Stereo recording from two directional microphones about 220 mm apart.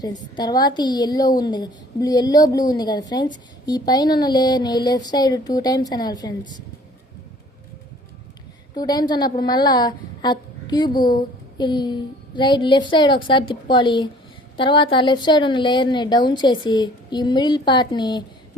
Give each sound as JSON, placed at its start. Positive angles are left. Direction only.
{"t": 0.0, "sound": "a woman's voice", "side_deg": 20}
{"t": 8.7, "sound": "a woman's voice", "side_deg": 20}